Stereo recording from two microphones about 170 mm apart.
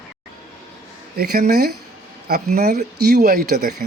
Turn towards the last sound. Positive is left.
turn(degrees=-65)  # may be behind; listen again after turning